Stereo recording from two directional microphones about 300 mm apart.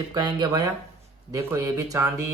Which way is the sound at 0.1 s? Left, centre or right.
Centre.